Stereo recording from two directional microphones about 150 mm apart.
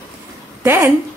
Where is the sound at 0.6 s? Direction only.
20° right (ahead or behind).